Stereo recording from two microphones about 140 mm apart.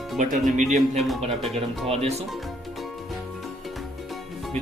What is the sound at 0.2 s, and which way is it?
Speech, 60° right (ahead or behind).